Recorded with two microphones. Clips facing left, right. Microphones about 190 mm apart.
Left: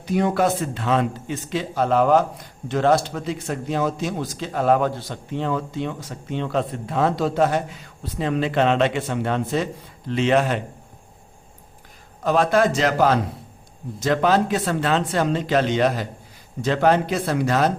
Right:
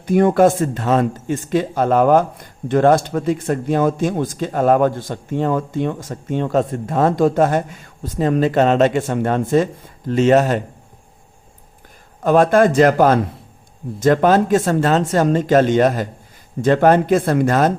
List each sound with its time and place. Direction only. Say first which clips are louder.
0.0 s speech: right 7 dB; 50° right (ahead or behind)
12.2 s speech: right 5 dB; 50° right (ahead or behind)